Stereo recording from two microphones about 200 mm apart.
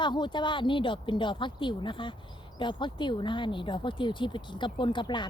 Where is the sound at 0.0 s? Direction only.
25° left (ahead or behind).